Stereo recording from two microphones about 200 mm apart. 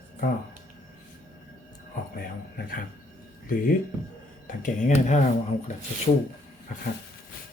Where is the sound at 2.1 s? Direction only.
50° left (ahead or behind).